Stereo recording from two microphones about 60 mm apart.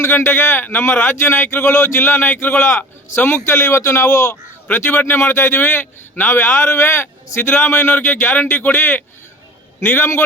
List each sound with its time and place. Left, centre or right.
0.0 s a man's voice: left
4.3 s speech: left